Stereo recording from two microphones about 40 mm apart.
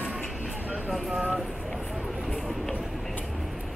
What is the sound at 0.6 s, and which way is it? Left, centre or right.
Vehicle, right.